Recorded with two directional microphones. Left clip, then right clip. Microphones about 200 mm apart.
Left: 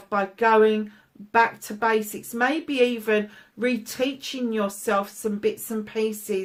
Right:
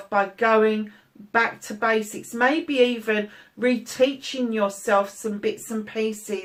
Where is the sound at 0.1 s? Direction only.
50° left (ahead or behind).